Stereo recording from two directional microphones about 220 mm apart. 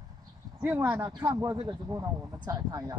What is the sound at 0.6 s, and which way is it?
Speech, 10° right (ahead or behind).